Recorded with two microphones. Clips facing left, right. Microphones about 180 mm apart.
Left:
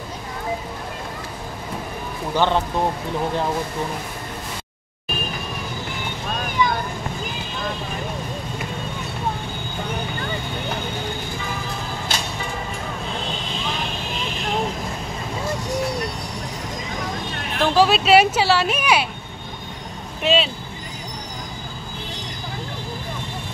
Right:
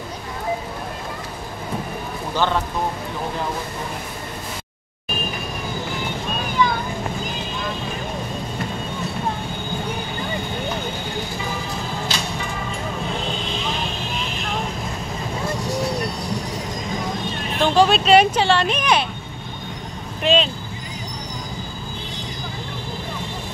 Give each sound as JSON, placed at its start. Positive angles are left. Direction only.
{"t": 2.3, "sound": "speech", "side_deg": 20}
{"t": 6.6, "sound": "vehicle", "side_deg": 15}
{"t": 12.1, "sound": "music", "side_deg": 55}
{"t": 17.6, "sound": "speech", "side_deg": 5}
{"t": 20.2, "sound": "speech", "side_deg": 5}